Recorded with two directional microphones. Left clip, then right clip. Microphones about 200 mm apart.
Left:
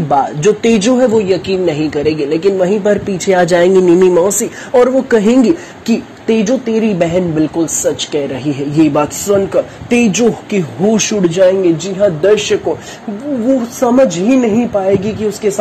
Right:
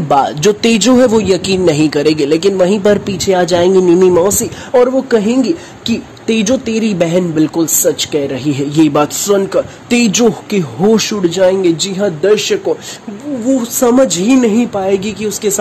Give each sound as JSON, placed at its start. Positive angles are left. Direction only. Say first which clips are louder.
{"t": 0.1, "sound": "speech", "louder": "right 1 dB", "side_deg": -25}
{"t": 1.0, "sound": "speech", "louder": "right 1 dB", "side_deg": -35}
{"t": 3.3, "sound": "speech", "louder": "left 1 dB", "side_deg": 0}
{"t": 5.1, "sound": "speech", "louder": "left 2 dB", "side_deg": 5}
{"t": 6.2, "sound": "speech", "louder": "even", "side_deg": -15}
{"t": 13.7, "sound": "speech", "louder": "right 1 dB", "side_deg": -20}